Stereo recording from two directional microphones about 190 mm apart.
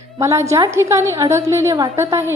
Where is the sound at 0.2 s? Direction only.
15° right (ahead or behind).